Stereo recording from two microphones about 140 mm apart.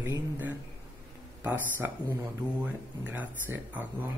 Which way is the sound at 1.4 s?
15° right (ahead or behind).